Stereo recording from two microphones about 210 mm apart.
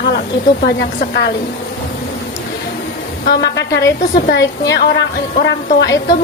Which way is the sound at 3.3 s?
50° left (ahead or behind).